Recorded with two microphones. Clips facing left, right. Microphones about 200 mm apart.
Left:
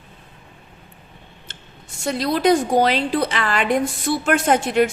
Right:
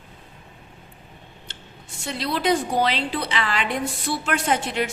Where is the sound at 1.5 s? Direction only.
50° left (ahead or behind).